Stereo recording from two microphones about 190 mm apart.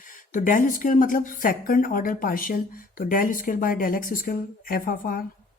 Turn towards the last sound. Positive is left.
turn(degrees=50)  # may be behind; listen again after turning